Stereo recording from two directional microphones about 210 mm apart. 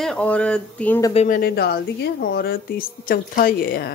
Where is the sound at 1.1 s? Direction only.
35° left (ahead or behind).